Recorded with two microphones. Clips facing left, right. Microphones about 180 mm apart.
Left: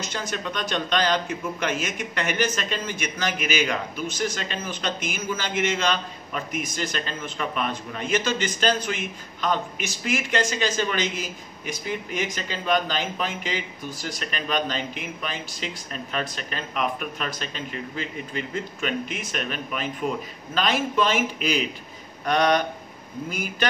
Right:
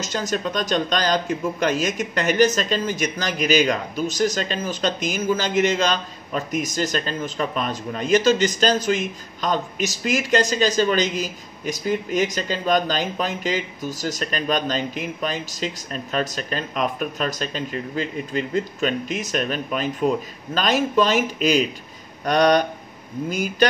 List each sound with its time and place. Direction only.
0.0 s speech: 40° right (ahead or behind)